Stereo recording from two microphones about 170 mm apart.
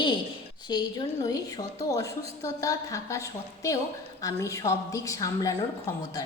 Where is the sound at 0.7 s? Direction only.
25° left (ahead or behind).